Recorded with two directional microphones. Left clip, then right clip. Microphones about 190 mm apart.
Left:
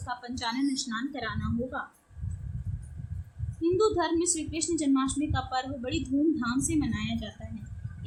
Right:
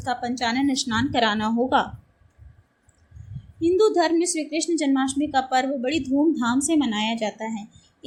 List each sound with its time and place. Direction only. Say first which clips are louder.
0.0 s a woman's voice: right 9 dB; 15° right (ahead or behind)
3.6 s a woman's voice: right 7 dB; 15° right (ahead or behind)